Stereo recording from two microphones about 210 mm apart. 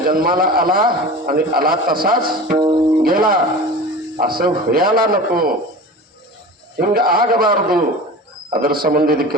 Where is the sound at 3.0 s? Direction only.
45° right (ahead or behind).